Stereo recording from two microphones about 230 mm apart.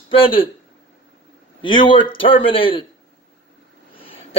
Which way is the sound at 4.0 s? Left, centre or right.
Left.